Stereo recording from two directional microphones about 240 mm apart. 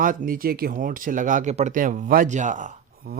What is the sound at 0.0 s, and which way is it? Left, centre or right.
Speech, right.